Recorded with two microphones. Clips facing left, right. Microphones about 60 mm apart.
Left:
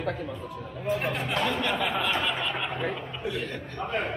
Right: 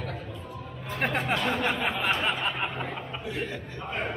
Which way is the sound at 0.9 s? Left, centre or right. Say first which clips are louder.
Right 3 dB; right.